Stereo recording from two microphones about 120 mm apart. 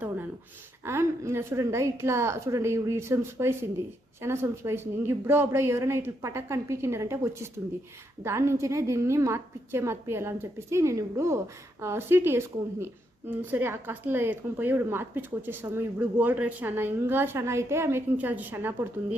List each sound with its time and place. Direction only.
0.9 s a woman's voice: 20° right (ahead or behind)